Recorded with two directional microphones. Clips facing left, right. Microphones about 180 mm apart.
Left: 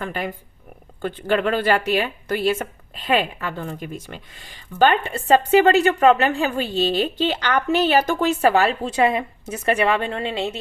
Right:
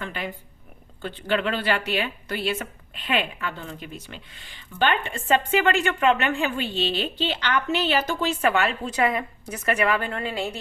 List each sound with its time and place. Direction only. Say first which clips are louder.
0.0 s a woman's voice: left 5 dB; 45° left (ahead or behind); by 10.6 s 25° left (ahead or behind)